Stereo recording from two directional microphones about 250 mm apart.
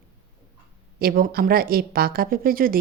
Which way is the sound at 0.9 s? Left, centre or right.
Right.